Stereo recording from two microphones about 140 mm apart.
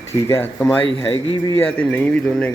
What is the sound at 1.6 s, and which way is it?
Speech, 10° left (ahead or behind).